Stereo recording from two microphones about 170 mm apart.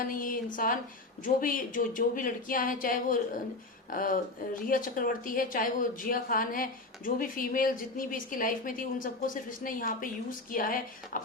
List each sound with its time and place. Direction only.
0.0 s speech: 55° left (ahead or behind)